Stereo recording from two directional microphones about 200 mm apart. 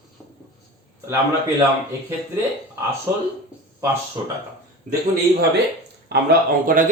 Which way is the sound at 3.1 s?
15° right (ahead or behind).